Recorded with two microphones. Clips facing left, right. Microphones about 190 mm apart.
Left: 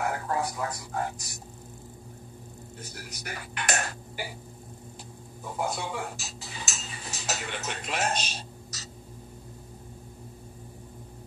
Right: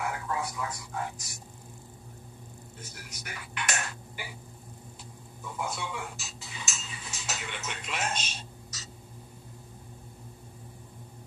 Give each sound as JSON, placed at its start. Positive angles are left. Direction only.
{"t": 0.0, "sound": "speech", "side_deg": 40}
{"t": 2.8, "sound": "speech", "side_deg": 35}
{"t": 5.4, "sound": "cutlery", "side_deg": 40}